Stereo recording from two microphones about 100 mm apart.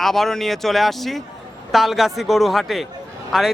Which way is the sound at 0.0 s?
5° left (ahead or behind).